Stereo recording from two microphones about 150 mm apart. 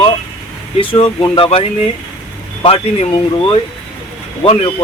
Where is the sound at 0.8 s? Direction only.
40° left (ahead or behind).